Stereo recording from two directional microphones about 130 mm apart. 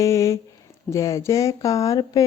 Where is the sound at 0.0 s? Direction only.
25° left (ahead or behind).